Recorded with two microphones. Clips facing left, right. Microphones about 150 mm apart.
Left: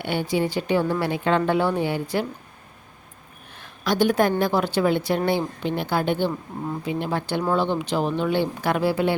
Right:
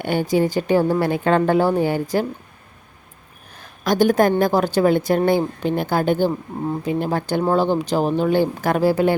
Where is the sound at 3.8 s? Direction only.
45° right (ahead or behind).